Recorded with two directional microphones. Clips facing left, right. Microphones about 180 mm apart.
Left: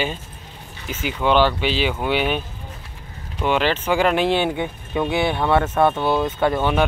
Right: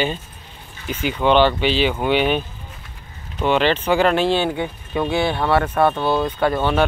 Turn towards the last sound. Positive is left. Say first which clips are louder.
# even
turn(degrees=15)  # may be behind; listen again after turning